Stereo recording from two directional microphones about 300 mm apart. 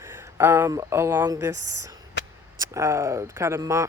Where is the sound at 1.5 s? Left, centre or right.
Right.